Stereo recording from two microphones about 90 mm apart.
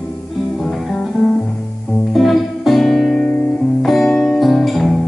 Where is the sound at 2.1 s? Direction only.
Centre (ahead or behind).